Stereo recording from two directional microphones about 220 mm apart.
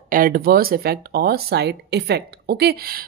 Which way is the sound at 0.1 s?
40° right (ahead or behind).